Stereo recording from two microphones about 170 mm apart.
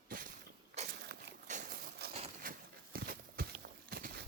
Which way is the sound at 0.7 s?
75° right (ahead or behind).